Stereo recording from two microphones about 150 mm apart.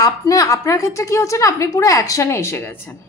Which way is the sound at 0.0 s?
25° left (ahead or behind).